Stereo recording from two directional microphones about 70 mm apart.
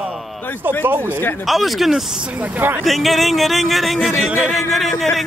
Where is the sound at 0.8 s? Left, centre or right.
Right.